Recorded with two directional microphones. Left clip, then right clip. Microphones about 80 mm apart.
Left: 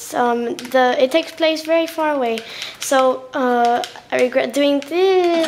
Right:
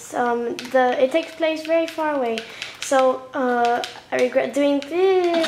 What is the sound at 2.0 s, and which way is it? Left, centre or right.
Speech, left.